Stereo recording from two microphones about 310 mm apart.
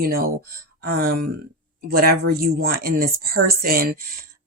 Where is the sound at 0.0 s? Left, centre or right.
Right.